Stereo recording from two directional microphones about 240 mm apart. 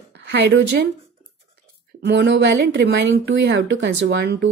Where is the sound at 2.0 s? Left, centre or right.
Right.